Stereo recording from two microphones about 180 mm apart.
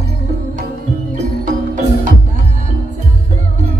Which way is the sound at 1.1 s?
45° right (ahead or behind).